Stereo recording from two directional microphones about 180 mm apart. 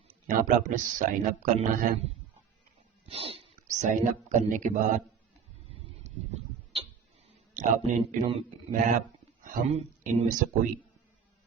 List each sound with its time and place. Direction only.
0.1 s a sound: 45° right (ahead or behind)
0.9 s speech: 45° right (ahead or behind)
3.1 s speech: 35° right (ahead or behind)
6.0 s tick-tock: 35° right (ahead or behind)
7.5 s speech: 40° right (ahead or behind)